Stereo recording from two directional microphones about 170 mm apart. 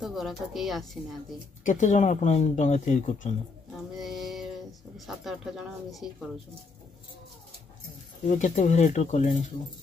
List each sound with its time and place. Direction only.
0.0 s speech: centre (ahead or behind)
1.6 s speech: 45° left (ahead or behind)
3.9 s a sound: centre (ahead or behind)
4.9 s speech: centre (ahead or behind)
8.3 s speech: 45° left (ahead or behind)